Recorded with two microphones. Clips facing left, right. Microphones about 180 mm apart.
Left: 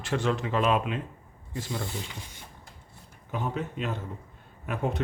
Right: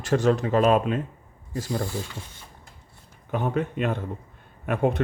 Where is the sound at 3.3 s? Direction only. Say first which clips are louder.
Right 6 dB; 55° right (ahead or behind).